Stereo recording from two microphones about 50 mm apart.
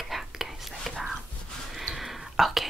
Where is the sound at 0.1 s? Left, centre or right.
Centre.